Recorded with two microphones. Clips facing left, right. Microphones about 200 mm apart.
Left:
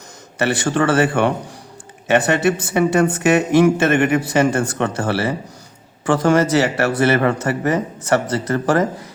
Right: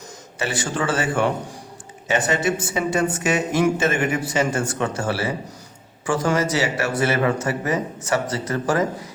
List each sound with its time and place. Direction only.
0.3 s speech: 65° left (ahead or behind)